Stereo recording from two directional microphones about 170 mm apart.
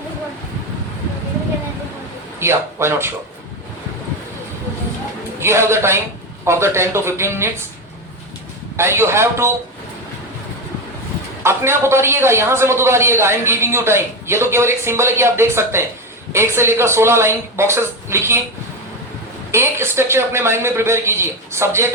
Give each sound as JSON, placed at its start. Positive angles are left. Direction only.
{"t": 2.4, "sound": "a man's voice", "side_deg": -15}
{"t": 5.4, "sound": "a man's voice", "side_deg": -15}
{"t": 8.7, "sound": "a man's voice", "side_deg": -15}
{"t": 11.4, "sound": "a man's voice", "side_deg": -15}
{"t": 19.5, "sound": "a man's voice", "side_deg": -15}